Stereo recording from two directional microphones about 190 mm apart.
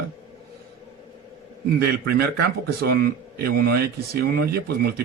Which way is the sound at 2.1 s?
55° right (ahead or behind).